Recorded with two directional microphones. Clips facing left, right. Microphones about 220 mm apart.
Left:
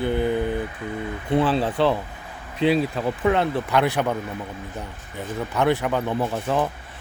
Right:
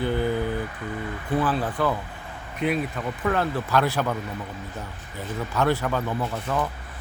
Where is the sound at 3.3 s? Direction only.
20° left (ahead or behind).